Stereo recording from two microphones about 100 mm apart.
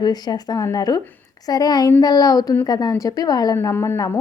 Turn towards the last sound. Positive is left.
turn(degrees=25)  # may be behind; listen again after turning